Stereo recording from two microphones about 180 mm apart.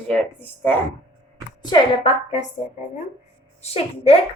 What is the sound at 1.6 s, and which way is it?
Speech, 25° left (ahead or behind).